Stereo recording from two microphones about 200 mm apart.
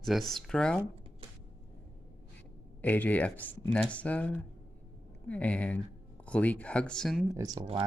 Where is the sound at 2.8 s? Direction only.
10° left (ahead or behind).